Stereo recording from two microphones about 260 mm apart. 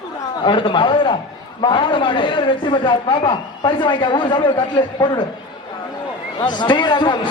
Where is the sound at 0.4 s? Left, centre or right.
Centre.